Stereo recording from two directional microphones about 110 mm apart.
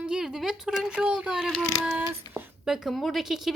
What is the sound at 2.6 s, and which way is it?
Speech, 5° right (ahead or behind).